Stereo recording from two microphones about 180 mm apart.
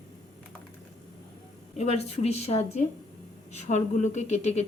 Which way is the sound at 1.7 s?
35° left (ahead or behind).